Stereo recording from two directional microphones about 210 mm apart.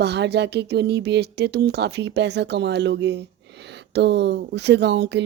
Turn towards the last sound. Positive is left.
turn(degrees=-55)  # may be behind; listen again after turning